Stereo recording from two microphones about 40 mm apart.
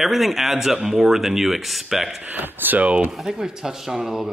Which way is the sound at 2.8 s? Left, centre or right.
Right.